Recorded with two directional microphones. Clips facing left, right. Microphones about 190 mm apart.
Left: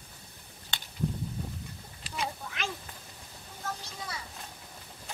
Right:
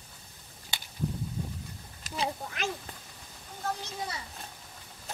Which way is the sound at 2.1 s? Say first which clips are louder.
Right 1 dB; 45° right (ahead or behind).